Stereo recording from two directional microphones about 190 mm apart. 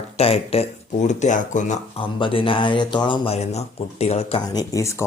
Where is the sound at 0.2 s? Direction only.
30° left (ahead or behind).